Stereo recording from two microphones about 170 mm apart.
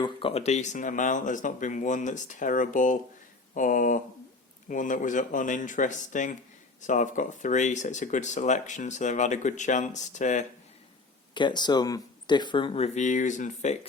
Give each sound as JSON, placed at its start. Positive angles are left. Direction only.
{"t": 0.0, "sound": "speech", "side_deg": 30}
{"t": 11.3, "sound": "speech", "side_deg": 25}